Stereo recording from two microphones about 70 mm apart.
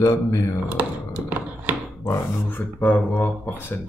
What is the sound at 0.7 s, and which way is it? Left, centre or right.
Computer keyboard, right.